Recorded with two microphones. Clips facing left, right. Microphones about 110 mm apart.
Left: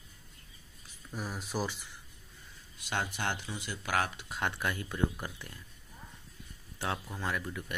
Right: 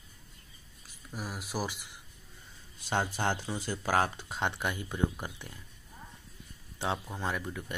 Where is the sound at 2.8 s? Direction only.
35° right (ahead or behind).